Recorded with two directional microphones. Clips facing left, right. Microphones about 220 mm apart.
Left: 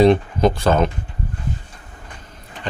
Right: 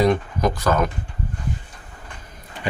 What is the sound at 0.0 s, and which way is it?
Speech, 25° left (ahead or behind).